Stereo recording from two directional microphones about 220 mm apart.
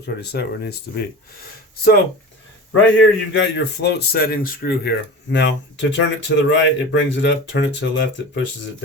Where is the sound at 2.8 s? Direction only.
55° left (ahead or behind).